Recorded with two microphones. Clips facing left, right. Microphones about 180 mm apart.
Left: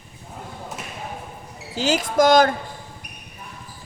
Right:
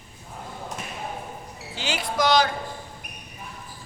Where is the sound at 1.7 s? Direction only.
40° left (ahead or behind).